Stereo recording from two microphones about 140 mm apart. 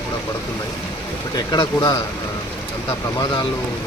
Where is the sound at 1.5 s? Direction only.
25° left (ahead or behind).